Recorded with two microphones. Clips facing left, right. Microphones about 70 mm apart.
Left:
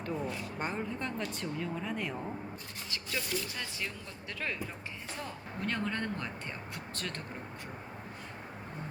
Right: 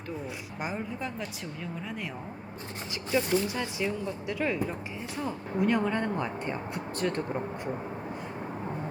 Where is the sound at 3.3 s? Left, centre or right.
Right.